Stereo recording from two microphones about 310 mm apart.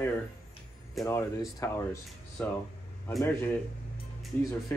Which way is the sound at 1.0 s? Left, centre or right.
Centre.